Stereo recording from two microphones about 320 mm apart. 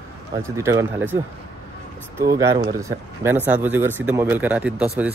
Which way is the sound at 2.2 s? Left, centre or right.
Centre.